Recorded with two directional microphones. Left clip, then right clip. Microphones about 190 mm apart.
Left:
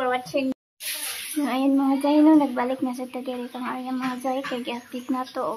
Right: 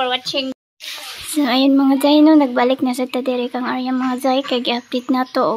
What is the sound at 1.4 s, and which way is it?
Speech, 25° right (ahead or behind).